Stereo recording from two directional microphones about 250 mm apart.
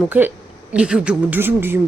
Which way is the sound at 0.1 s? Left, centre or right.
Centre.